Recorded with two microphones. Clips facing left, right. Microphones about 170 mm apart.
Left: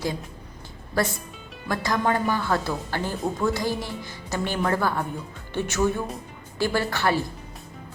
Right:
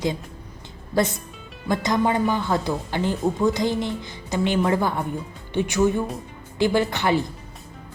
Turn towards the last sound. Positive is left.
turn(degrees=-20)  # may be behind; listen again after turning